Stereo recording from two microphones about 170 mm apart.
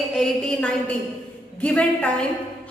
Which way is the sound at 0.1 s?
5° left (ahead or behind).